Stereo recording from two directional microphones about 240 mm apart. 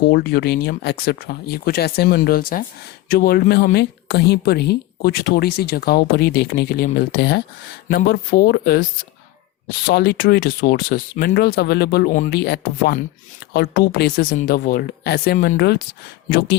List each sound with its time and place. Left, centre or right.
0.0 s speech: left
9.8 s speech: left